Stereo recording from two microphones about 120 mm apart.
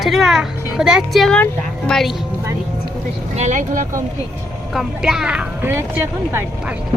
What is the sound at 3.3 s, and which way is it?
Speech, 85° right.